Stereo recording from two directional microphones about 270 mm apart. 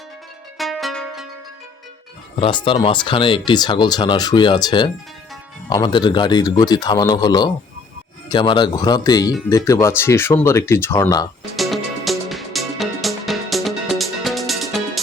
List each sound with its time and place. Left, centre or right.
0.6 s music: centre
2.4 s speech: centre
11.5 s music: centre